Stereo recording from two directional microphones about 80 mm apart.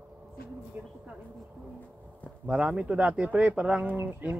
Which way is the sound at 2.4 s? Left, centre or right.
Centre.